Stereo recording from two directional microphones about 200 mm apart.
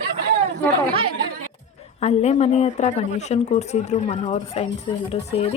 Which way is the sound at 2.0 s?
35° left (ahead or behind).